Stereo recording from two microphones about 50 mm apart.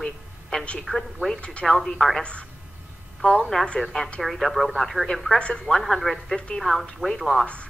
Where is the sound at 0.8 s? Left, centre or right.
Centre.